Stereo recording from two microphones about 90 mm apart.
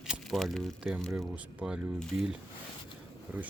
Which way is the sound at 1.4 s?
10° right (ahead or behind).